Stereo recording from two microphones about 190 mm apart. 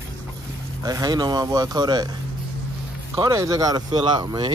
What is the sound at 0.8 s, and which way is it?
Speech, 20° right (ahead or behind).